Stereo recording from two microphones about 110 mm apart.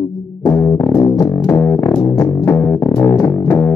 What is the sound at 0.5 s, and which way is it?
Music, 10° left (ahead or behind).